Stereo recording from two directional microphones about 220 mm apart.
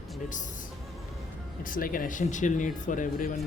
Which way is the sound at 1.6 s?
40° left (ahead or behind).